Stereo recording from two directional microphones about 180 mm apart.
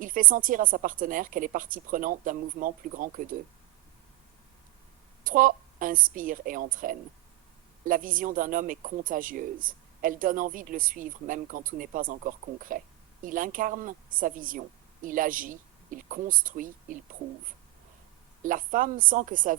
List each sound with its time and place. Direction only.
0.0 s speech: 50° right (ahead or behind)
5.2 s speech: 50° right (ahead or behind)
18.4 s speech: 50° right (ahead or behind)